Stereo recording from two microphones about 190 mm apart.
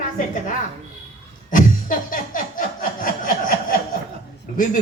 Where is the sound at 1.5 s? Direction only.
45° left (ahead or behind).